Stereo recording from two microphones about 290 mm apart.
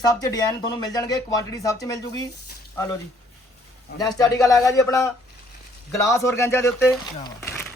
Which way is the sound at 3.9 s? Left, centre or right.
Centre.